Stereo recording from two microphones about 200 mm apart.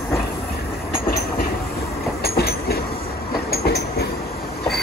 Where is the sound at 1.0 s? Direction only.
45° left (ahead or behind).